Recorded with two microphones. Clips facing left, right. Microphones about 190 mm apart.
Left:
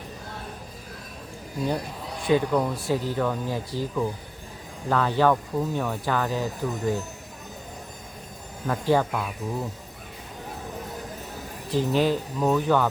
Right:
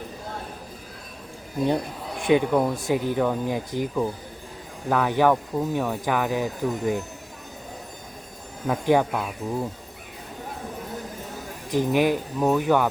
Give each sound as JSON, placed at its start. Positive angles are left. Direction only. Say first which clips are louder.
{"t": 2.2, "sound": "speech", "louder": "right 2 dB", "side_deg": -20}
{"t": 8.6, "sound": "speech", "louder": "right 2 dB", "side_deg": -15}
{"t": 11.7, "sound": "speech", "louder": "right 2 dB", "side_deg": -15}